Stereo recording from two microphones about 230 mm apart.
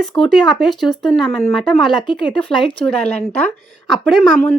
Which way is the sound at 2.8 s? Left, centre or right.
Centre.